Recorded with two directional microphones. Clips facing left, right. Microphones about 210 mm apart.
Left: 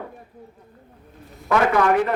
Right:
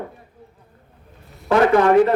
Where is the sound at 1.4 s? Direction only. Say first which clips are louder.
Right 4 dB; 30° right (ahead or behind).